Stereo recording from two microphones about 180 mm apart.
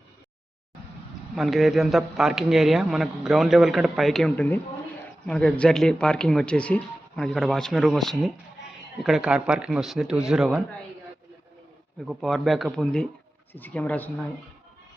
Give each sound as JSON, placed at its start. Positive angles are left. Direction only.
{"t": 1.4, "sound": "a man's voice", "side_deg": 0}
{"t": 12.0, "sound": "a man's voice", "side_deg": 0}